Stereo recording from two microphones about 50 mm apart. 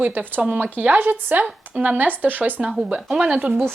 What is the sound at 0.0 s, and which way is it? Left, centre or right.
Speech, right.